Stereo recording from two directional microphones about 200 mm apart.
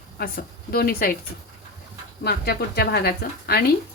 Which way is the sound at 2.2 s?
55° left (ahead or behind).